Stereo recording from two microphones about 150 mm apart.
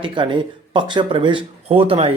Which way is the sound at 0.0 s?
35° right (ahead or behind).